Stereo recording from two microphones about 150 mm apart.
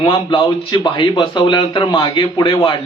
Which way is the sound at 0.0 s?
35° left (ahead or behind).